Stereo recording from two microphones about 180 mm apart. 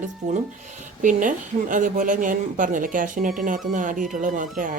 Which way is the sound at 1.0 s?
45° right (ahead or behind).